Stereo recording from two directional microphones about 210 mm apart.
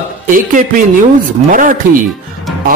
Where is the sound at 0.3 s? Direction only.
40° right (ahead or behind).